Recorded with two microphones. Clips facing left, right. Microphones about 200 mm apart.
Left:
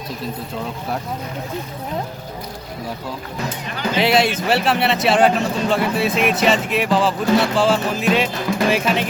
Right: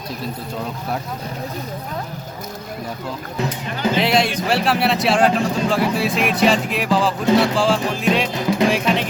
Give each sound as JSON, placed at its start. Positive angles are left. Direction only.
{"t": 3.9, "sound": "speech", "side_deg": 0}